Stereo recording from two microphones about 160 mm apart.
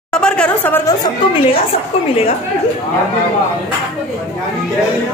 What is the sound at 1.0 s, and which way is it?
A woman's voice, 35° left (ahead or behind).